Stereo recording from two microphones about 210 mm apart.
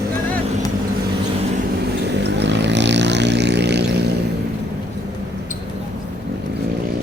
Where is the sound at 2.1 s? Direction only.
55° right (ahead or behind).